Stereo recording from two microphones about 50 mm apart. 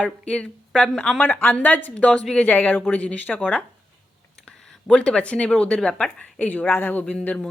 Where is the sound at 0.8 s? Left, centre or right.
Centre.